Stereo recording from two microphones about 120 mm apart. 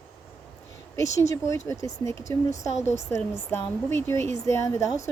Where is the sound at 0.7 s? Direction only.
25° left (ahead or behind).